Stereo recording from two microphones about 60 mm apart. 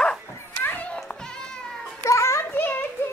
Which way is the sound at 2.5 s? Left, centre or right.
Left.